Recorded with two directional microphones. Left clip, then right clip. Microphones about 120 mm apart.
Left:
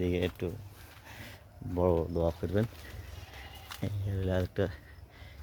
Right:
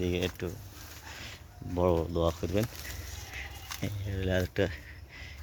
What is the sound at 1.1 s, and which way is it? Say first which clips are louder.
Speech: right 3 dB; 55° left (ahead or behind).